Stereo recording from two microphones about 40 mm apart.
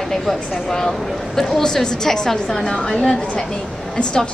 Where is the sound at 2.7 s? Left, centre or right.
Centre.